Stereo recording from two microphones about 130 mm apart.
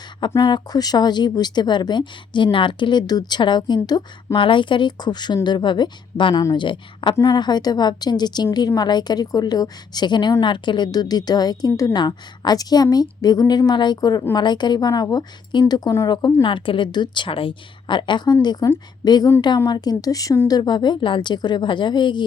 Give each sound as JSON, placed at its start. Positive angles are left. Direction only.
{"t": 0.4, "sound": "a woman's voice", "side_deg": 35}
{"t": 16.1, "sound": "a woman's voice", "side_deg": 40}